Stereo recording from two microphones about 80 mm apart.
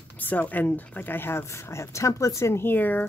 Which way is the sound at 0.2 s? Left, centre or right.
Left.